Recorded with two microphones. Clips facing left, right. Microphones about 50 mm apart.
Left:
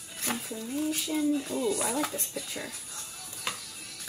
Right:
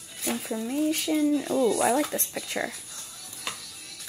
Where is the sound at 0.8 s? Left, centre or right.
Right.